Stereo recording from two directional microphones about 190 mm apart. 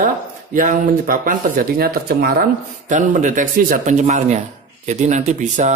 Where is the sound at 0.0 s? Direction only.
45° right (ahead or behind).